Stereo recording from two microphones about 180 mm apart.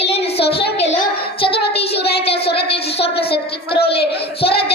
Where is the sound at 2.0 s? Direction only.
65° left (ahead or behind).